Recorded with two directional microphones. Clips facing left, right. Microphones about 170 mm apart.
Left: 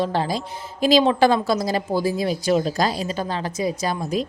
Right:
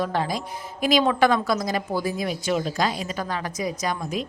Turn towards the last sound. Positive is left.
turn(degrees=30)  # may be behind; listen again after turning